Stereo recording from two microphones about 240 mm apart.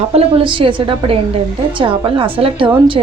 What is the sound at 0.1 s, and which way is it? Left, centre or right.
A woman's voice, right.